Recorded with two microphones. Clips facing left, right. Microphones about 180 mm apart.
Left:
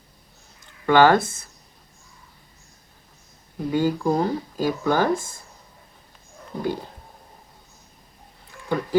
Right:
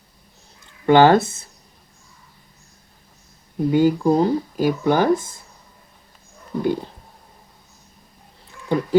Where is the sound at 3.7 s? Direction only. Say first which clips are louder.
Right 5 dB; 15° right (ahead or behind).